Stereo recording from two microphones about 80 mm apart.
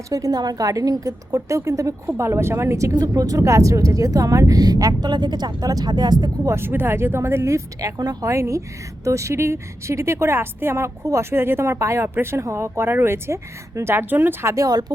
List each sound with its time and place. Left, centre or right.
0.1 s speech: right
2.9 s speech: right
6.5 s speech: right
14.5 s speech: right